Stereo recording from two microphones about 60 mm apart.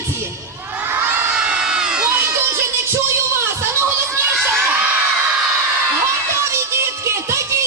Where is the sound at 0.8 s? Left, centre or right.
Right.